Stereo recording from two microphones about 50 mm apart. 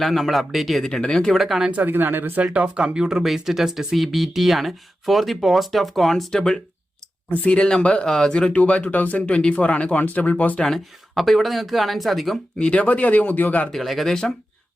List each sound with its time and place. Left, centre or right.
0.0 s speech: centre
0.9 s speech: centre
1.3 s speech: centre
1.7 s speech: right
2.4 s speech: right; by 6.6 s centre
7.3 s speech: left
9.3 s speech: left
10.6 s speech: centre
12.5 s speech: left
13.7 s speech: centre